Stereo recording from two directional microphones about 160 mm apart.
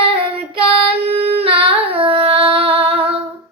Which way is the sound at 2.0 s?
35° right (ahead or behind).